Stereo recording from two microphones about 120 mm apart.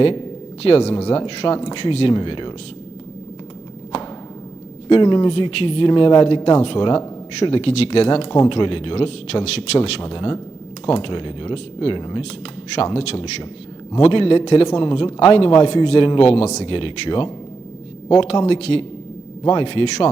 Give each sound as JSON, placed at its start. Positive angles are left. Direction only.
{"t": 0.0, "sound": "speech", "side_deg": 40}
{"t": 0.6, "sound": "a man's voice", "side_deg": 60}
{"t": 4.9, "sound": "a man's voice", "side_deg": 40}
{"t": 12.7, "sound": "a man's voice", "side_deg": 55}